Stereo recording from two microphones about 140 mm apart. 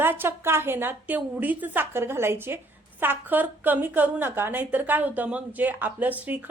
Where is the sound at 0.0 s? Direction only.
15° right (ahead or behind).